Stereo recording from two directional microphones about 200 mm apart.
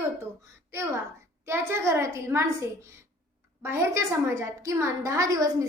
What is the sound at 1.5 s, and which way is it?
A woman's voice, 15° right (ahead or behind).